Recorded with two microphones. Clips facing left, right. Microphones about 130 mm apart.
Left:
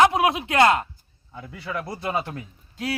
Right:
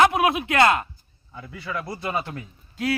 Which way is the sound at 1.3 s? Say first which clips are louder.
Even; 40° left (ahead or behind).